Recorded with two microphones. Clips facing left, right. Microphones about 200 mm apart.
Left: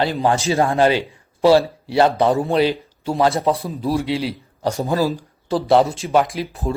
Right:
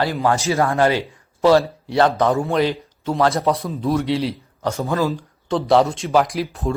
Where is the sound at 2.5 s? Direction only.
30° left (ahead or behind).